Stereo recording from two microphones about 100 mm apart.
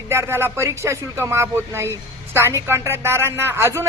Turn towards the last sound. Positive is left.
turn(degrees=-25)  # may be behind; listen again after turning